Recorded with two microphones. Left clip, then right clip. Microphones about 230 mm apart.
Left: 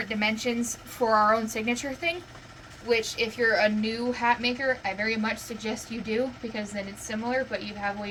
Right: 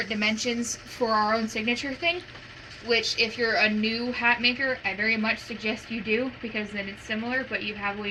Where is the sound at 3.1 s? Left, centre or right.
Left.